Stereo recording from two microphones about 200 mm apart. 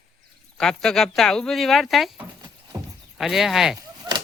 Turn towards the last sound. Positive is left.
turn(degrees=-15)  # may be behind; listen again after turning